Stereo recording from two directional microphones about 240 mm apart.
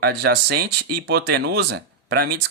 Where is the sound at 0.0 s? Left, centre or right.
Right.